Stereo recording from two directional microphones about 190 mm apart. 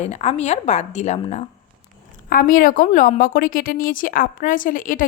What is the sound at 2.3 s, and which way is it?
A woman's voice, 50° left (ahead or behind).